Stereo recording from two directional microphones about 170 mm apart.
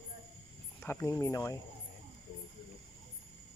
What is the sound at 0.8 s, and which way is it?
Speech, 15° left (ahead or behind).